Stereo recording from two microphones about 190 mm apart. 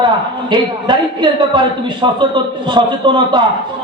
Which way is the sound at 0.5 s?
25° right (ahead or behind).